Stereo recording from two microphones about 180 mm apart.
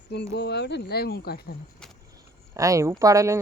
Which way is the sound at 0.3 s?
70° left (ahead or behind).